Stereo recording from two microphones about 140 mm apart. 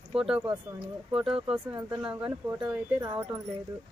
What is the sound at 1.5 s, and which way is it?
Speech, 10° right (ahead or behind).